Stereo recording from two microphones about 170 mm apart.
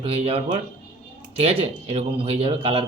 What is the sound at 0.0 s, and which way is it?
Speech, 35° right (ahead or behind).